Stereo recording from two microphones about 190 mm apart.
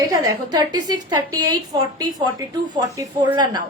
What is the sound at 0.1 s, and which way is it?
A woman's voice, 20° right (ahead or behind).